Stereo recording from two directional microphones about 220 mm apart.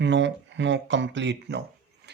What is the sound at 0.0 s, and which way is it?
Speech, 55° right (ahead or behind).